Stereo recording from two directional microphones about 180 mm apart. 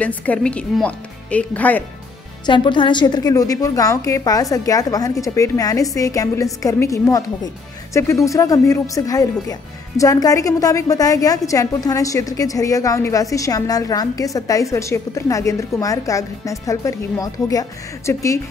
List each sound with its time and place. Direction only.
0.0 s speech: 10° left (ahead or behind)
2.4 s a woman's voice: 25° left (ahead or behind)